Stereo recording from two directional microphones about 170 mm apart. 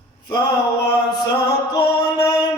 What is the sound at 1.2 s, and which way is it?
Music, 25° left (ahead or behind).